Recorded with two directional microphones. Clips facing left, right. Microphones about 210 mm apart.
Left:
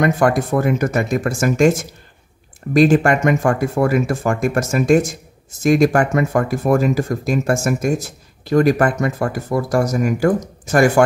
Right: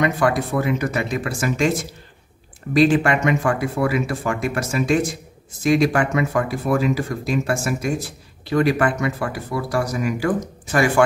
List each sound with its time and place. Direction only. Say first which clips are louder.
0.0 s speech: left 3 dB; 45° left (ahead or behind)